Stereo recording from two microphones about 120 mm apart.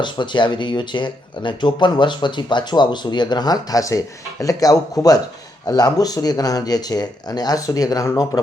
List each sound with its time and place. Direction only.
0.0 s speech: 40° left (ahead or behind)